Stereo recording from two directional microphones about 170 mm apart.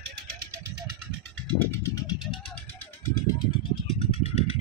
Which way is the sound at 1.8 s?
20° left (ahead or behind).